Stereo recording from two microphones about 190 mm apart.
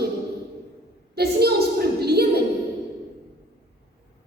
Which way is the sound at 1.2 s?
55° right (ahead or behind).